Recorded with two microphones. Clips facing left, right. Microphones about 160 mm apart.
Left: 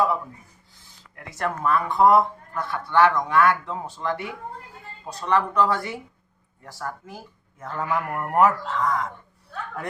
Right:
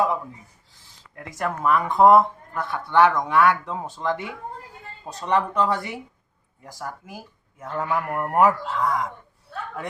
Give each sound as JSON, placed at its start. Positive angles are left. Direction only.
{"t": 1.4, "sound": "a man's voice", "side_deg": -15}